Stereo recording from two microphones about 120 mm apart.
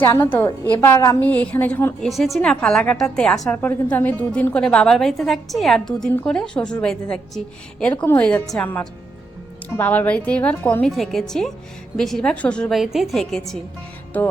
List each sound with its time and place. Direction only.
0.0 s a woman's voice: 20° left (ahead or behind)
2.0 s a woman's voice: centre (ahead or behind)
10.8 s a woman's voice: centre (ahead or behind)
14.1 s a woman's voice: 15° left (ahead or behind)